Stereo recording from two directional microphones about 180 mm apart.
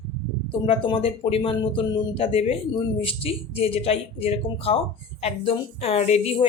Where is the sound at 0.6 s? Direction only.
30° left (ahead or behind).